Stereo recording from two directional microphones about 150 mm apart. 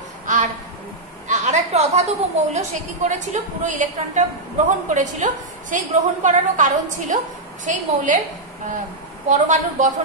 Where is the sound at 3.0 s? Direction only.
55° right (ahead or behind).